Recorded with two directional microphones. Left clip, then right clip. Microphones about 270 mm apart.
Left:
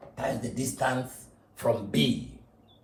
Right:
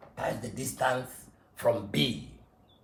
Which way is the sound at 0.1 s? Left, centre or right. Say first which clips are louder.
Left 2 dB; right.